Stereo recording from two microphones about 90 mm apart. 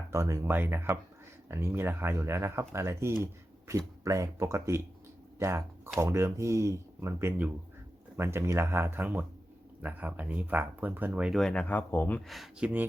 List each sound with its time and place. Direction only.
0.1 s speech: 35° right (ahead or behind)
0.5 s speech: 25° right (ahead or behind)
11.2 s speech: centre (ahead or behind)
11.7 s speech: 20° left (ahead or behind)
12.5 s speech: 15° right (ahead or behind)